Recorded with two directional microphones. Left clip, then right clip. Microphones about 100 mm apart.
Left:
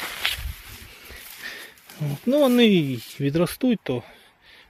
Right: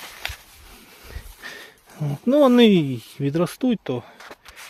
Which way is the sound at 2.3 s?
45° right (ahead or behind).